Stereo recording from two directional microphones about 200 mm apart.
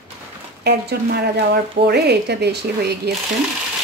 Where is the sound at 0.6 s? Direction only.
55° right (ahead or behind).